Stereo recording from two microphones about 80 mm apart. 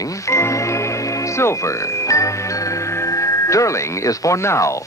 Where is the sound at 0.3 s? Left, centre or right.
Left.